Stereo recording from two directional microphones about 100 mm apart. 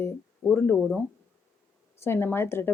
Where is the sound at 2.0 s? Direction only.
25° left (ahead or behind).